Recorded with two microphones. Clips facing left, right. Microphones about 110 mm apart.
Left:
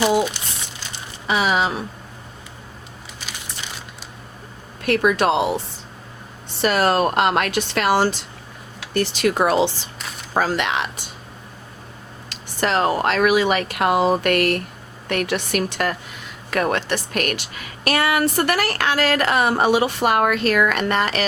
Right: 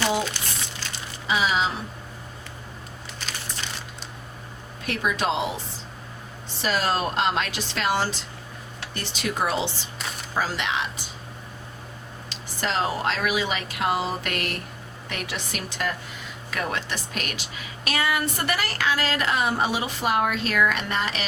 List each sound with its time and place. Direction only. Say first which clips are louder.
1.3 s speech: left 4 dB; 60° left (ahead or behind)
3.2 s a sound: even; 10° left (ahead or behind)
4.9 s a woman's voice: left 8 dB; 65° left (ahead or behind)
6.6 s a woman's voice: left 7 dB; 60° left (ahead or behind)
10.3 s a woman's voice: left 6 dB; 55° left (ahead or behind)
12.3 s a woman's voice: left 7 dB; 60° left (ahead or behind)